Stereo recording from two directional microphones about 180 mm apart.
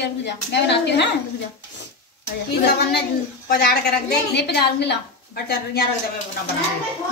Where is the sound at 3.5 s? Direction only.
60° left (ahead or behind).